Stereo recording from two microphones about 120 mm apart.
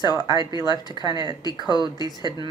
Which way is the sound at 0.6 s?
35° left (ahead or behind).